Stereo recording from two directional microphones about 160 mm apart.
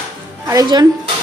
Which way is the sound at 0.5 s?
25° right (ahead or behind).